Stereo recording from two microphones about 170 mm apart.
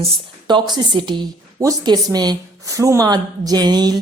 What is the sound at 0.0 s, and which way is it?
A woman's voice, 35° right (ahead or behind).